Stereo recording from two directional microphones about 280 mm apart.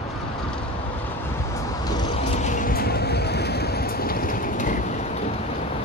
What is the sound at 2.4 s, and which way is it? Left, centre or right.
Vehicle, left.